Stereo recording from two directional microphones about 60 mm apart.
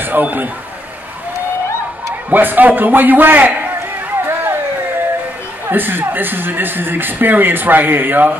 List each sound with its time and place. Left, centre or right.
0.0 s speech: right
2.3 s speech: right
4.2 s vehicle: right
5.7 s speech: right